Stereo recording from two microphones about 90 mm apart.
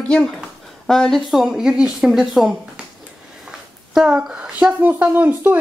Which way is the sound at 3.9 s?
5° right (ahead or behind).